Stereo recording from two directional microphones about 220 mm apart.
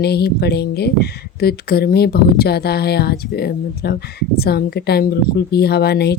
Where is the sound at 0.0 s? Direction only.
45° left (ahead or behind).